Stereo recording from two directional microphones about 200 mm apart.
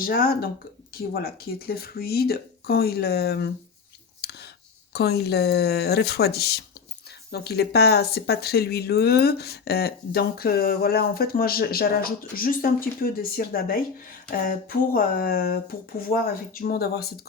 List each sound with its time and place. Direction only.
0.0 s speech: 45° left (ahead or behind)
4.2 s a sound: 55° left (ahead or behind)
4.9 s speech: 55° left (ahead or behind)